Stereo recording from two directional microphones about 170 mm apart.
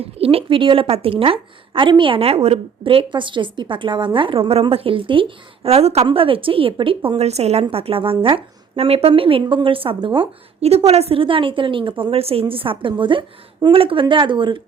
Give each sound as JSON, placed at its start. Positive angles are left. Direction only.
{"t": 0.0, "sound": "a woman's voice", "side_deg": -35}